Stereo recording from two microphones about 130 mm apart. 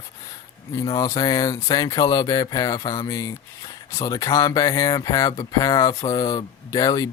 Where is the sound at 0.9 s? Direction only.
30° left (ahead or behind).